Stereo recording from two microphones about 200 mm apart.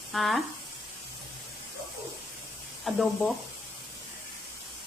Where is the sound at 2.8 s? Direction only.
Centre (ahead or behind).